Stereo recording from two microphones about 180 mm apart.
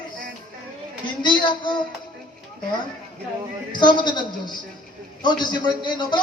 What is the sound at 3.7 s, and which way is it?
A man's voice, 25° left (ahead or behind).